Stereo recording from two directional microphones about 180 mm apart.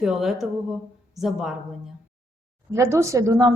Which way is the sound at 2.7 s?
15° right (ahead or behind).